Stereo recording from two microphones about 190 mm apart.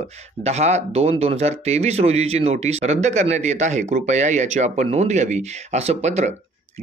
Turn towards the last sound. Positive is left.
turn(degrees=-35)  # may be behind; listen again after turning